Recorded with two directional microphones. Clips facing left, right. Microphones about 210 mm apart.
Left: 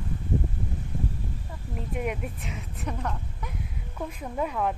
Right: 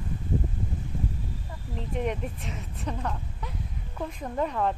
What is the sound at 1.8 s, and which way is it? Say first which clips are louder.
Speech: right 1 dB; 5° left (ahead or behind).